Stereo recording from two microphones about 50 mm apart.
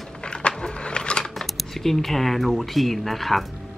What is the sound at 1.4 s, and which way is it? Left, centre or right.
Speech, centre.